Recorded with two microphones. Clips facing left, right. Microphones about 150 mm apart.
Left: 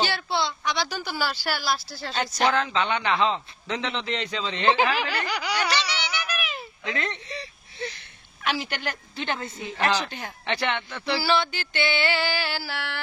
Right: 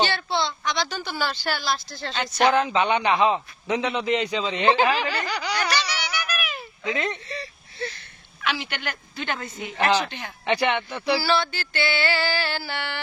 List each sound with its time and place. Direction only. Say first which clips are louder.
0.0 s a woman's voice: right 2 dB; 10° left (ahead or behind)
2.4 s a man's voice: right 4 dB; 15° right (ahead or behind)
5.1 s music: right 1 dB; 10° left (ahead or behind)
5.7 s music: right 1 dB; 25° left (ahead or behind)
6.8 s speech: right 4 dB; 10° right (ahead or behind)
7.2 s whimper: right 2 dB; 15° left (ahead or behind)
8.4 s a woman's voice: even; 40° left (ahead or behind)
9.1 s a woman's voice: right 1 dB; 25° left (ahead or behind)
10.4 s a man's voice: right 5 dB; 15° right (ahead or behind)
11.2 s music: right 1 dB; 15° left (ahead or behind); by 13.0 s centre (ahead or behind)